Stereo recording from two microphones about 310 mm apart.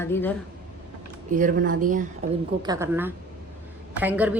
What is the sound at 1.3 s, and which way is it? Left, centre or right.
Speech, right.